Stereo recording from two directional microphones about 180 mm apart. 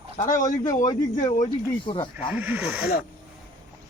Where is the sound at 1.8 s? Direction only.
30° left (ahead or behind).